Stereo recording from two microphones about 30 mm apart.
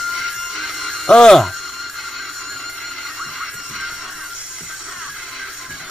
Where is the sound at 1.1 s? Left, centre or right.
Left.